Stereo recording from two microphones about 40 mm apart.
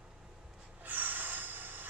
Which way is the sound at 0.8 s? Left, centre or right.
Right.